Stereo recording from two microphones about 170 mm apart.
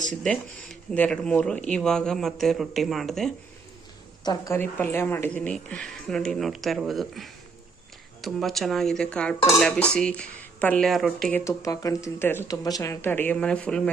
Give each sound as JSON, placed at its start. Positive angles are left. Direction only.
{"t": 0.1, "sound": "speech", "side_deg": 5}
{"t": 4.2, "sound": "a woman's voice", "side_deg": 25}
{"t": 4.5, "sound": "speech", "side_deg": 10}
{"t": 11.4, "sound": "speech", "side_deg": 20}